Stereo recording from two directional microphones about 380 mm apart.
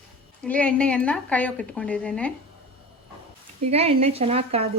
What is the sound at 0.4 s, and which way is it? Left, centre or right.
A woman's voice, centre.